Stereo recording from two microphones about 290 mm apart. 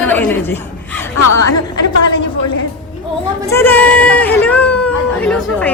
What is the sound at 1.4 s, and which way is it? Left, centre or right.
Speech, left.